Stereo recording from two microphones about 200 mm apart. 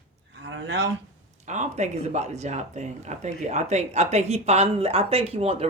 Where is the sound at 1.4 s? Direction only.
35° right (ahead or behind).